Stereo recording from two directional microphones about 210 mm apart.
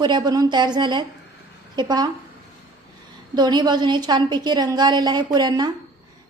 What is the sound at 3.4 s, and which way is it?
A woman's voice, 20° right (ahead or behind).